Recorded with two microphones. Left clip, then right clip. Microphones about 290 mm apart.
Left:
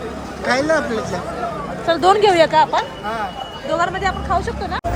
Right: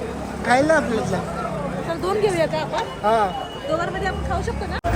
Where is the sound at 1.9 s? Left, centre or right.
Left.